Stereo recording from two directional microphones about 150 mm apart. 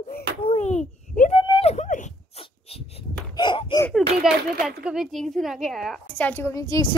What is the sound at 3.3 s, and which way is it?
Speech, 30° left (ahead or behind).